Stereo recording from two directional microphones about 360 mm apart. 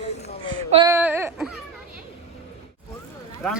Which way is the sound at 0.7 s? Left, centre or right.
Centre.